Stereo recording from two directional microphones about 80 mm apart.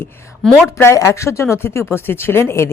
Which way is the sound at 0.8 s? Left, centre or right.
Left.